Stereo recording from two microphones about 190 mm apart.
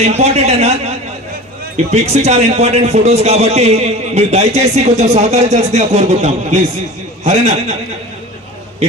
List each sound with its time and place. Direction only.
0.0 s a man's voice: 35° right (ahead or behind)